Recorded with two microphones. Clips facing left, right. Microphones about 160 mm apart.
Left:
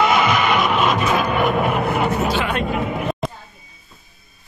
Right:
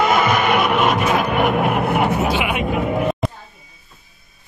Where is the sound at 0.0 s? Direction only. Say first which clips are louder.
Right 1 dB; 50° right (ahead or behind); by 1.8 s 70° right (ahead or behind).